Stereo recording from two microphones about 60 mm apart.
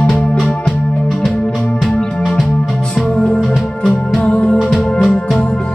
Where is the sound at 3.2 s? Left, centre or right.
Centre.